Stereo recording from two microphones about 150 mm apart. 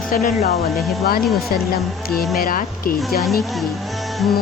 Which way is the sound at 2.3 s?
70° left (ahead or behind).